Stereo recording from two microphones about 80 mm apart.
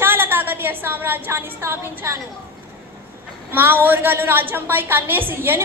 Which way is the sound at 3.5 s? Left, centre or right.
Right.